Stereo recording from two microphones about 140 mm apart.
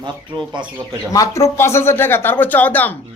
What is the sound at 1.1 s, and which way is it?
A man's voice, 25° left (ahead or behind).